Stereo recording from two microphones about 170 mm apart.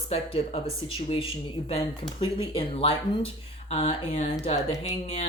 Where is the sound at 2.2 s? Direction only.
30° left (ahead or behind).